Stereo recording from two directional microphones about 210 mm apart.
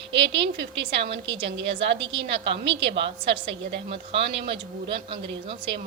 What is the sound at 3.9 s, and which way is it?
Speech, 25° right (ahead or behind).